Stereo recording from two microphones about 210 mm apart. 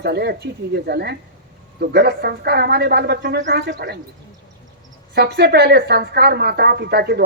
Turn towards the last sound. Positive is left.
turn(degrees=-50)  # may be behind; listen again after turning